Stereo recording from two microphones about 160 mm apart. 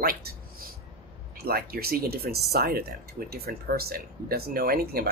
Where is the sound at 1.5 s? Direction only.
70° right (ahead or behind).